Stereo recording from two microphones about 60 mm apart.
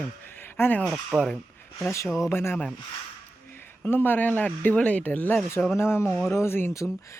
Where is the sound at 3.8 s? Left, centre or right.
Left.